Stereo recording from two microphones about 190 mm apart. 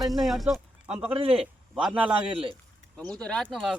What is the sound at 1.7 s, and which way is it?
Speech, 5° right (ahead or behind).